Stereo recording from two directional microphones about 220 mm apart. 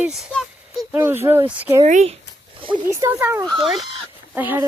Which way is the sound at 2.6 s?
25° right (ahead or behind).